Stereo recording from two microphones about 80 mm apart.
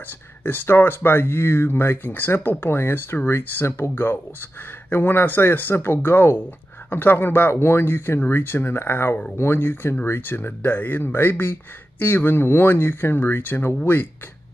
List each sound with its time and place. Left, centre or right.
0.4 s speech: left